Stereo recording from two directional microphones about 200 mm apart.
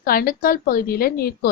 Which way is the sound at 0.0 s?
50° left (ahead or behind).